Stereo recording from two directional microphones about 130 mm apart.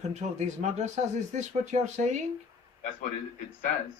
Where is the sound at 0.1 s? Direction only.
65° right (ahead or behind).